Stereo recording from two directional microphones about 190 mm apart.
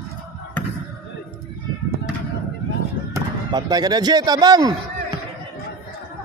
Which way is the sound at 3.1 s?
20° right (ahead or behind).